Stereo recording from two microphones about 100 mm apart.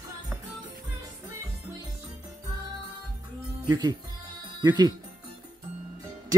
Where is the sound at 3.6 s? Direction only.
40° right (ahead or behind).